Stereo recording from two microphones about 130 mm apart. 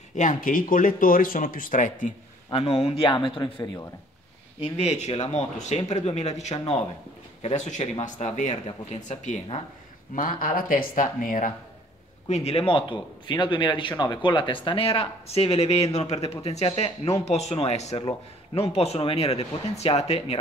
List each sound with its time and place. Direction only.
0.1 s speech: 80° left
2.5 s speech: 50° left (ahead or behind)
4.7 s speech: 55° left (ahead or behind)
8.6 s speech: 55° left (ahead or behind)
10.1 s speech: 90° left
12.3 s speech: 55° left (ahead or behind)